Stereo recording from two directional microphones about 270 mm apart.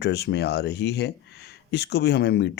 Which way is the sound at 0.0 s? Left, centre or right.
Left.